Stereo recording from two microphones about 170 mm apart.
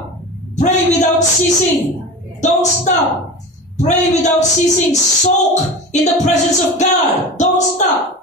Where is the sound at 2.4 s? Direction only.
45° left (ahead or behind).